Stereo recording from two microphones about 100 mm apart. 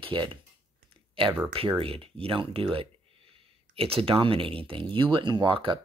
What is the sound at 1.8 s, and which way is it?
Speech, 65° right (ahead or behind).